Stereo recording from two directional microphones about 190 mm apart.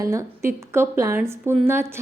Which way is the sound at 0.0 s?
15° right (ahead or behind).